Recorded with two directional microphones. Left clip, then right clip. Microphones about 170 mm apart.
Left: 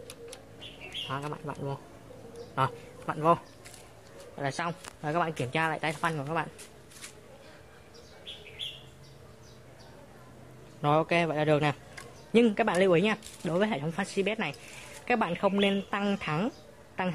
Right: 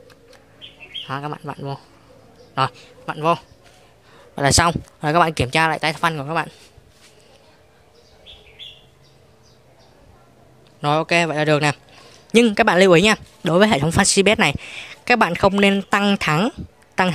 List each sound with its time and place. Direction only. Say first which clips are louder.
1.0 s a man's voice: right 9 dB; 35° right (ahead or behind)
4.4 s speech: right 16 dB; 55° right (ahead or behind)
10.8 s speech: right 8 dB; 40° right (ahead or behind)